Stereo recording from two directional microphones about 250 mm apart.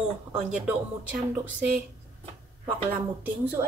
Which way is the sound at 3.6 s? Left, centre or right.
Centre.